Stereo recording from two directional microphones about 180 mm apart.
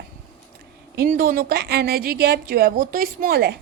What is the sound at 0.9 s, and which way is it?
A woman's voice, 50° right (ahead or behind).